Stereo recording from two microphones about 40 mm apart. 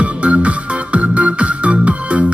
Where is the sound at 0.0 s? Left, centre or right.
Right.